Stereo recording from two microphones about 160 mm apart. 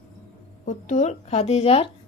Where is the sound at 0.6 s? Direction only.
50° left (ahead or behind).